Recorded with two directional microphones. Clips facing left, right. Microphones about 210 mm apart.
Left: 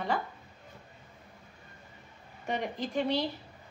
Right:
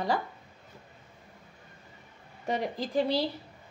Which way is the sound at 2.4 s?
35° right (ahead or behind).